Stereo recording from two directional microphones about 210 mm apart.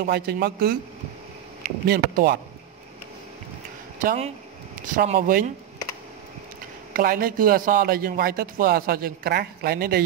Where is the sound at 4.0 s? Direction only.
40° right (ahead or behind).